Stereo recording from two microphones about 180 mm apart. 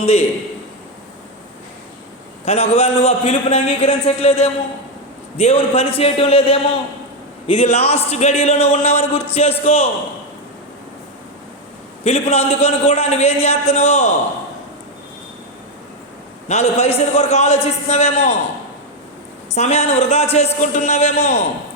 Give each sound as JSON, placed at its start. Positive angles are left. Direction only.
{"t": 0.0, "sound": "a man's voice", "side_deg": 35}
{"t": 2.4, "sound": "a man's voice", "side_deg": 35}
{"t": 12.0, "sound": "a man's voice", "side_deg": 35}
{"t": 16.5, "sound": "a man's voice", "side_deg": 35}
{"t": 19.5, "sound": "a man's voice", "side_deg": 35}